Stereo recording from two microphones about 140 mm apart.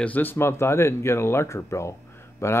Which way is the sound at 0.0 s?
10° left (ahead or behind).